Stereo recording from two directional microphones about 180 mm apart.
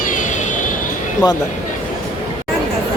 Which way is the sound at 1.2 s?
25° left (ahead or behind).